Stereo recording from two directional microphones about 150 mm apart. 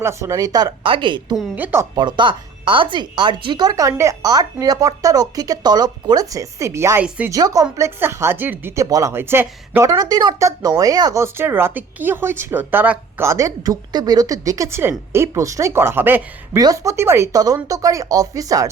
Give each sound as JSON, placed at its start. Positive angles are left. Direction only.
{"t": 0.0, "sound": "speech", "side_deg": -20}
{"t": 1.5, "sound": "speech", "side_deg": -15}
{"t": 2.0, "sound": "speech", "side_deg": -30}